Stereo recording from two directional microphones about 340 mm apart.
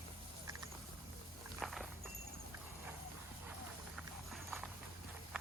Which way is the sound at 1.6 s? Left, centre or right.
Centre.